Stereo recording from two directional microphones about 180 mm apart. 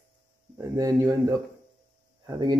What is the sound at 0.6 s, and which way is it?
Speech, 20° right (ahead or behind).